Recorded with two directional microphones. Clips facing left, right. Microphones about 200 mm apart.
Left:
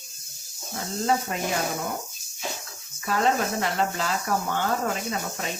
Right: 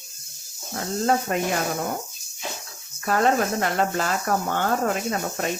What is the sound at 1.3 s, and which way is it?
Speech, 55° right (ahead or behind).